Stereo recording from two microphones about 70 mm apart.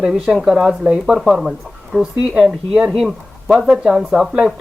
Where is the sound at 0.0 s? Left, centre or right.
Centre.